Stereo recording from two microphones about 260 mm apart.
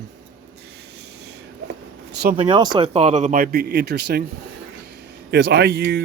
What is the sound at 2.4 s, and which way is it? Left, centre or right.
Speech, centre.